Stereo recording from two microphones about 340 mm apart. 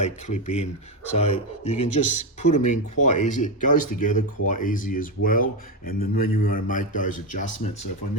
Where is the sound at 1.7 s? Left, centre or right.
Left.